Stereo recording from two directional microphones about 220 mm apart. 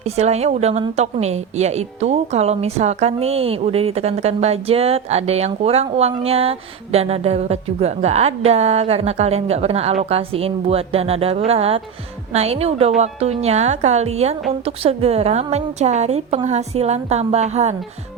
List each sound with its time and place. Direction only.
0.0 s a woman's voice: 30° right (ahead or behind)